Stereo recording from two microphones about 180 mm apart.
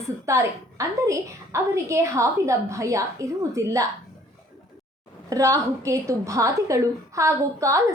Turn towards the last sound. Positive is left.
turn(degrees=-15)  # may be behind; listen again after turning